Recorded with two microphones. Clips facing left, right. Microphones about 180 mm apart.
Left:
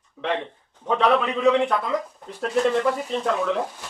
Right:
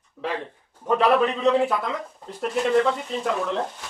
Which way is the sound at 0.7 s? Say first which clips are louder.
Right 1 dB; 5° right (ahead or behind).